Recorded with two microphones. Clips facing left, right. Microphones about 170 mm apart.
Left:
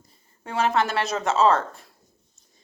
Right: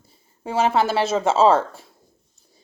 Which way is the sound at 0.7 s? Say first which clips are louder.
Right 4 dB; 30° right (ahead or behind).